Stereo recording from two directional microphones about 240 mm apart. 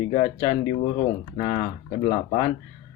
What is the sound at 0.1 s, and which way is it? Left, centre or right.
Speech, left.